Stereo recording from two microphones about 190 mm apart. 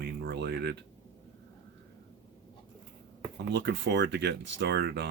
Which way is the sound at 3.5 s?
65° right (ahead or behind).